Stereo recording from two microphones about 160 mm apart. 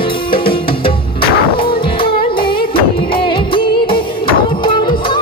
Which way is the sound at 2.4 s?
30° left (ahead or behind).